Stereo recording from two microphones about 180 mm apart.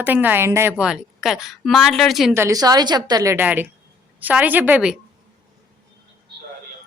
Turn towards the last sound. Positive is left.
turn(degrees=-5)  # may be behind; listen again after turning